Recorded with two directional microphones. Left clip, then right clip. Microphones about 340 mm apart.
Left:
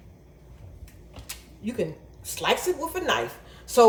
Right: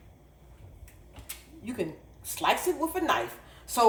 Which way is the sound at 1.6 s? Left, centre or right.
Centre.